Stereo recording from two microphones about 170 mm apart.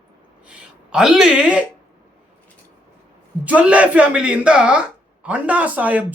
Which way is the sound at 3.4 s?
10° right (ahead or behind).